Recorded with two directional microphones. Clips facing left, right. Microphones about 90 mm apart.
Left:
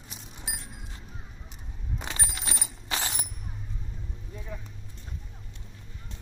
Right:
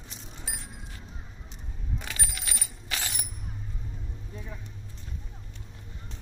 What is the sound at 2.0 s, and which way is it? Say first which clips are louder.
Bicycle bell: left 6 dB; 30° left (ahead or behind).